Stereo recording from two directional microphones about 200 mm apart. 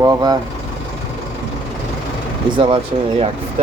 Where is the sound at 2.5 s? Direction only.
25° right (ahead or behind).